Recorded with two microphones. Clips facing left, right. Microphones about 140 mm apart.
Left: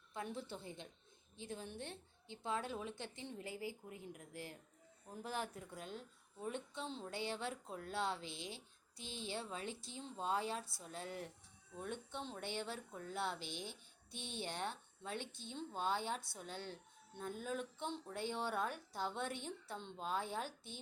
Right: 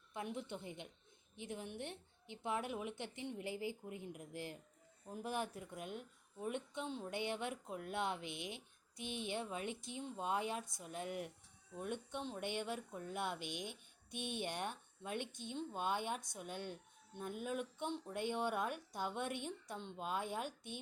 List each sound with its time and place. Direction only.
0.1 s a woman's voice: 20° right (ahead or behind)
14.2 s speech: 60° right (ahead or behind)
14.4 s speech: 15° right (ahead or behind)